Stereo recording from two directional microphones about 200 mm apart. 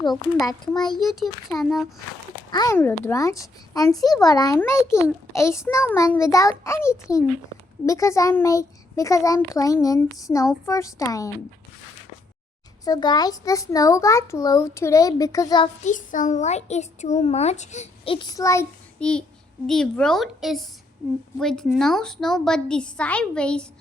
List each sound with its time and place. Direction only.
0.4 s a child's voice: 20° left (ahead or behind)
0.9 s a woman's voice: centre (ahead or behind)
2.5 s a child's voice: 20° left (ahead or behind)
12.8 s a child's voice: 20° left (ahead or behind)
15.8 s a child's voice: 40° left (ahead or behind); by 23.6 s 5° left (ahead or behind)